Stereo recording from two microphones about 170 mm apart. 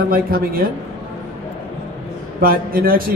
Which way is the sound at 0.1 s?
60° right (ahead or behind).